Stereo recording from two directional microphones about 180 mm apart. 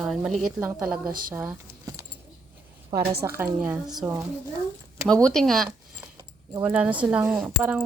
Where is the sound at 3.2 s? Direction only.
10° right (ahead or behind).